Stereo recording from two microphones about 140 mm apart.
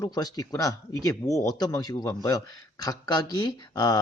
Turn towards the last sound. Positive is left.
turn(degrees=25)  # may be behind; listen again after turning